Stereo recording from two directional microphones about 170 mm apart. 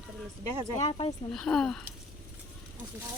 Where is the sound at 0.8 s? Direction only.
30° left (ahead or behind).